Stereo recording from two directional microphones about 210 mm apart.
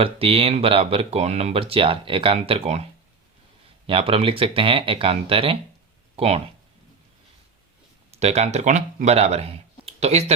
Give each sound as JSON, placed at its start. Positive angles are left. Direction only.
{"t": 0.0, "sound": "speech", "side_deg": -25}
{"t": 3.8, "sound": "speech", "side_deg": -25}
{"t": 8.1, "sound": "speech", "side_deg": -30}